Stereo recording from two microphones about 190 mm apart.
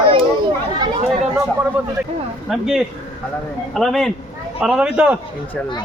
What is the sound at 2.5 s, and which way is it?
Speech, centre (ahead or behind).